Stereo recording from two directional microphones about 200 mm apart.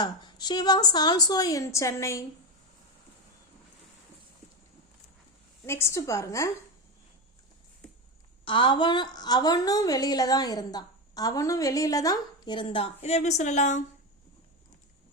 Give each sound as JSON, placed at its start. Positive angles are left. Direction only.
{"t": 0.0, "sound": "a woman's voice", "side_deg": 20}
{"t": 5.6, "sound": "a woman's voice", "side_deg": 15}
{"t": 8.4, "sound": "a woman's voice", "side_deg": 25}